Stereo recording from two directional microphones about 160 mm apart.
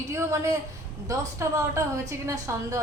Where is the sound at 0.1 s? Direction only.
20° right (ahead or behind).